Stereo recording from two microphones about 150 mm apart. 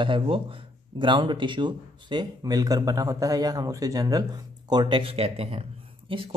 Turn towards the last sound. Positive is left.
turn(degrees=-35)  # may be behind; listen again after turning